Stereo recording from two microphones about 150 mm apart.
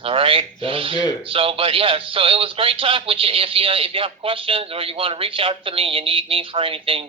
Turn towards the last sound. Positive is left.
turn(degrees=-35)  # may be behind; listen again after turning